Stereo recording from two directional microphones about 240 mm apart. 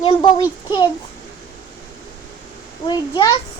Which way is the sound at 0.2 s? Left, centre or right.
Centre.